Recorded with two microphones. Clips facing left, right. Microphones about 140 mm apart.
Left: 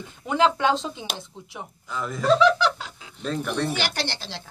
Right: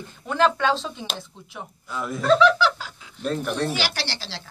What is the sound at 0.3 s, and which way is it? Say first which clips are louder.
Speech: even; 15° left (ahead or behind).